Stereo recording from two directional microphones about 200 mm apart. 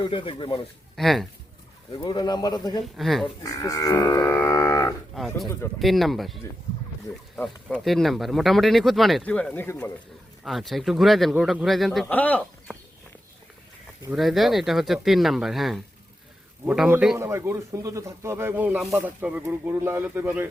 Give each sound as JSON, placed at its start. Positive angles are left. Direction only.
{"t": 0.0, "sound": "speech", "side_deg": 25}
{"t": 0.9, "sound": "speech", "side_deg": 0}
{"t": 1.9, "sound": "speech", "side_deg": 20}
{"t": 2.8, "sound": "speech", "side_deg": 0}
{"t": 3.4, "sound": "livestock", "side_deg": 15}
{"t": 5.1, "sound": "speech", "side_deg": 0}
{"t": 10.4, "sound": "speech", "side_deg": 0}
{"t": 14.1, "sound": "a man's voice", "side_deg": 0}